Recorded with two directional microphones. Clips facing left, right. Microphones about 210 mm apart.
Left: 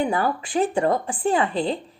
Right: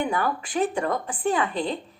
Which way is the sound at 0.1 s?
30° left (ahead or behind).